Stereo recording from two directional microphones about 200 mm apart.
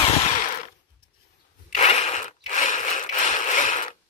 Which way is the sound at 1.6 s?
35° left (ahead or behind).